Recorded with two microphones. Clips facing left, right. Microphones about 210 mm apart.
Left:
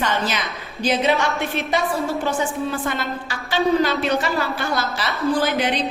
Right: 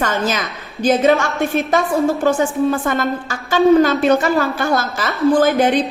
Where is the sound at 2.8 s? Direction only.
50° right (ahead or behind).